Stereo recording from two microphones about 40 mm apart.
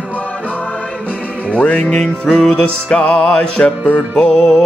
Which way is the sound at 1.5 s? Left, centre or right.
Left.